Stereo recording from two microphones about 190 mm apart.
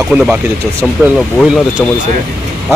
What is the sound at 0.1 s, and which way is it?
Speech, 10° right (ahead or behind).